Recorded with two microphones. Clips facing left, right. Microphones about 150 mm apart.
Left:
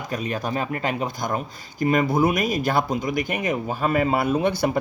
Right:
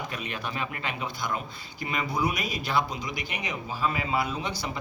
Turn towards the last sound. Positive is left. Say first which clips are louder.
# left 11 dB
turn(degrees=55)  # may be behind; listen again after turning